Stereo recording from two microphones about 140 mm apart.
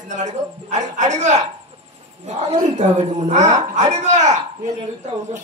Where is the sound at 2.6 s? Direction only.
60° right (ahead or behind).